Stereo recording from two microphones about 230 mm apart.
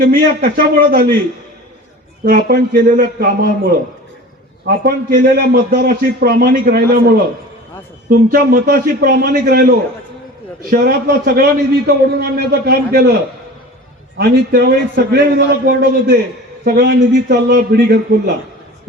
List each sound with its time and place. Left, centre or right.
0.0 s a man's voice: right
2.2 s a man's voice: right
8.3 s a man's voice: right
14.2 s a man's voice: right